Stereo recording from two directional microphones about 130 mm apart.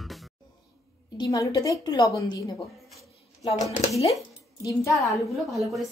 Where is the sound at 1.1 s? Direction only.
25° left (ahead or behind).